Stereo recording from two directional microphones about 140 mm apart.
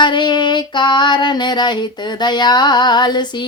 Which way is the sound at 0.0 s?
35° left (ahead or behind).